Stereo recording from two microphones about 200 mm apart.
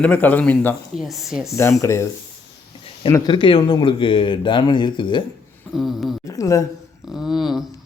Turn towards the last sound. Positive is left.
turn(degrees=0)  # may be behind; listen again after turning